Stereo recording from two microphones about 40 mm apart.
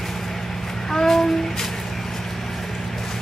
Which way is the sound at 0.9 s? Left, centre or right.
Centre.